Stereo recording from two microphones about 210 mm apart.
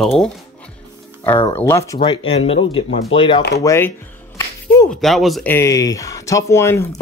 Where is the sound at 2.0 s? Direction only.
25° left (ahead or behind).